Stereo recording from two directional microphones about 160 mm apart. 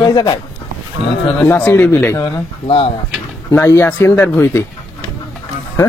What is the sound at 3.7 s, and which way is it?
Speech, 15° left (ahead or behind).